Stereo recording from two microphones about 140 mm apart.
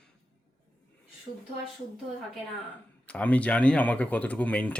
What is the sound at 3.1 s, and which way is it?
Speech, 10° left (ahead or behind).